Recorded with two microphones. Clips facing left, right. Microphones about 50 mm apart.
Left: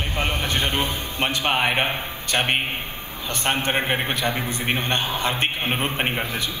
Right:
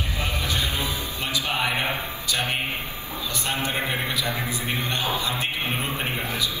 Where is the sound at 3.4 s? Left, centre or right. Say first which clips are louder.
Left 5 dB; left.